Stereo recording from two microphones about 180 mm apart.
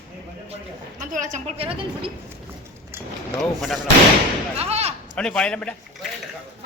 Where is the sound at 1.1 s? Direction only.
45° right (ahead or behind).